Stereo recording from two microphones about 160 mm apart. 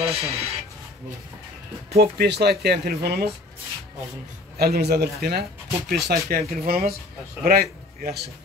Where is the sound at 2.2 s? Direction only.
90° right.